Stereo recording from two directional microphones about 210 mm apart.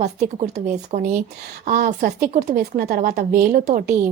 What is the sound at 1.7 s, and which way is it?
A woman's voice, 40° right (ahead or behind).